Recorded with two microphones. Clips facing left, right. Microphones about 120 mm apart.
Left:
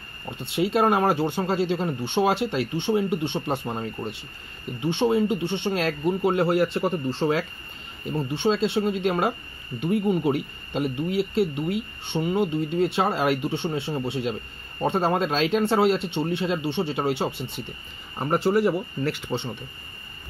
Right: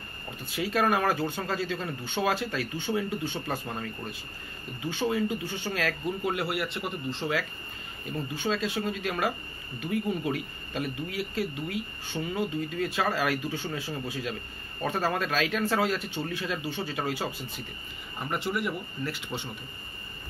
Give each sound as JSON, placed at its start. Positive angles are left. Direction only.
{"t": 0.4, "sound": "speech", "side_deg": 25}
{"t": 18.2, "sound": "speech", "side_deg": 40}